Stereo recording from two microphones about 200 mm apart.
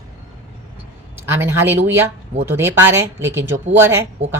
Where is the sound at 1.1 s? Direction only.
10° right (ahead or behind).